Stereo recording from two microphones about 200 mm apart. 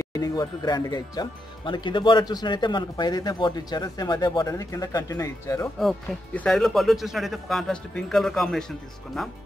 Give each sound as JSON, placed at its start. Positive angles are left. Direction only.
{"t": 0.1, "sound": "speech", "side_deg": 20}
{"t": 5.8, "sound": "speech", "side_deg": 5}